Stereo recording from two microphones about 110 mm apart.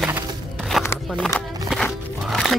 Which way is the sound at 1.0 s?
Centre (ahead or behind).